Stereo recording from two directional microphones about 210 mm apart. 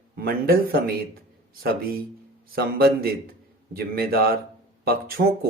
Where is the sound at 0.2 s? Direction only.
45° right (ahead or behind).